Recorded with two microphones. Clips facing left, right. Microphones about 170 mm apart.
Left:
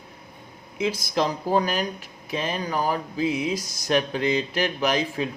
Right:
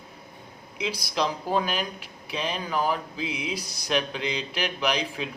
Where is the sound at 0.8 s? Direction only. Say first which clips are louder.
Left 4 dB; 45° left (ahead or behind).